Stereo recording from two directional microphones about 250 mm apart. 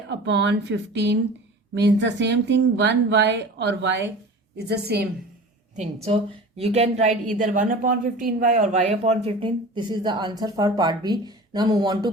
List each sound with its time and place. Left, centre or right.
0.1 s a woman's voice: right
5.7 s a woman's voice: right